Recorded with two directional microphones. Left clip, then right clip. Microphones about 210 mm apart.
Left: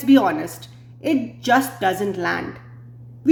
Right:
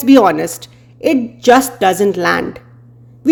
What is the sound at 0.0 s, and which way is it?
Speech, 50° right (ahead or behind).